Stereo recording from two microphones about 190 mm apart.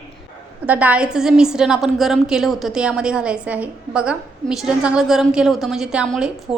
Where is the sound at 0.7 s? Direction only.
10° right (ahead or behind).